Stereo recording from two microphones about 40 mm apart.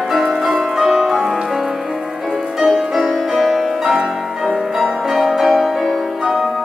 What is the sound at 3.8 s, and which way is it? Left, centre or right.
Music, centre.